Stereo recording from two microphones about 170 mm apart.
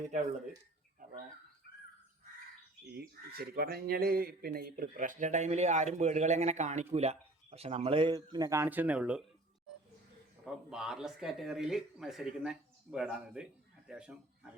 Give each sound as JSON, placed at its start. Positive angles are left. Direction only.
{"t": 1.7, "sound": "crow", "side_deg": 70}
{"t": 2.9, "sound": "speech", "side_deg": -65}
{"t": 10.4, "sound": "speech", "side_deg": -5}